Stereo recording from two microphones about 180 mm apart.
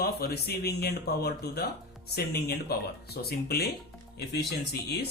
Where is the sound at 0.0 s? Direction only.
60° left (ahead or behind).